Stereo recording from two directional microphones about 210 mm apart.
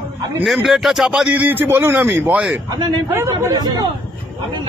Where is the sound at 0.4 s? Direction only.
Centre (ahead or behind); by 3.8 s 20° right (ahead or behind).